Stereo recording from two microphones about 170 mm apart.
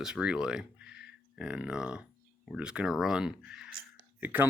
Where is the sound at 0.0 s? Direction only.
5° right (ahead or behind).